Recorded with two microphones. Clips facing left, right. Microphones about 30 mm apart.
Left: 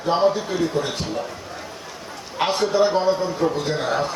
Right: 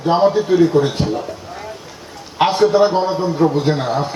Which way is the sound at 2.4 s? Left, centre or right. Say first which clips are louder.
Right 7 dB; right.